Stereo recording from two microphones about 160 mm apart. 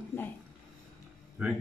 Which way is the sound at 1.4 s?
10° right (ahead or behind).